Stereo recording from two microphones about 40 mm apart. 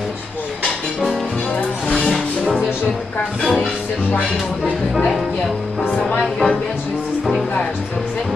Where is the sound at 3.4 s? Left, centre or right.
Centre.